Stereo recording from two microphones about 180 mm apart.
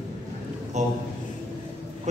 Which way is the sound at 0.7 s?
40° right (ahead or behind).